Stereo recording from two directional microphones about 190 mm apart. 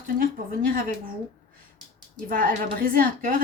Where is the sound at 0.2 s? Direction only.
50° right (ahead or behind).